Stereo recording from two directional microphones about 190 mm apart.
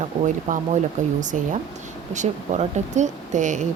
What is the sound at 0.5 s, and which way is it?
A woman's voice, 45° right (ahead or behind).